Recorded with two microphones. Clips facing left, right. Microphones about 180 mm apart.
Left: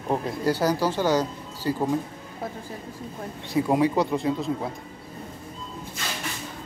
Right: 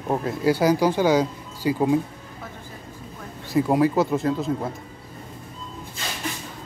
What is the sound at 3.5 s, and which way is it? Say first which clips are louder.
Speech: right 2 dB; centre (ahead or behind).